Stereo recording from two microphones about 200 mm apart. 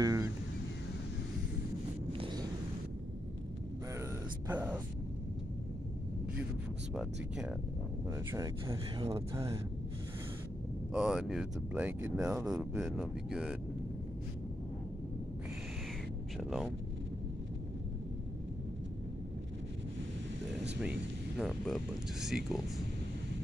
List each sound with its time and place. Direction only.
0.0 s a sound: 15° right (ahead or behind)
2.1 s wind noise: 25° right (ahead or behind)
4.5 s a sound: 10° right (ahead or behind)
7.0 s speech: centre (ahead or behind)
8.1 s speech: 15° right (ahead or behind)
10.9 s speech: 5° right (ahead or behind)
16.3 s speech: centre (ahead or behind)
21.4 s speech: centre (ahead or behind)